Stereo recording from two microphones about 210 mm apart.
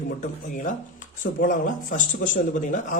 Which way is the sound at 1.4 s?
40° left (ahead or behind).